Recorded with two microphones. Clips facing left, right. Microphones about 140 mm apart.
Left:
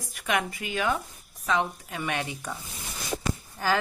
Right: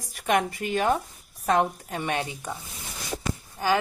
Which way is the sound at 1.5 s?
50° right (ahead or behind).